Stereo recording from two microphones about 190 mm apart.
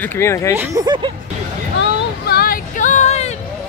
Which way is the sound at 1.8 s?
60° left (ahead or behind).